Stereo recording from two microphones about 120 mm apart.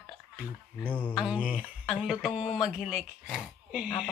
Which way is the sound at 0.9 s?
15° left (ahead or behind).